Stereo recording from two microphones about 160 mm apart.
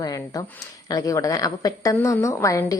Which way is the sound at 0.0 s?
20° left (ahead or behind).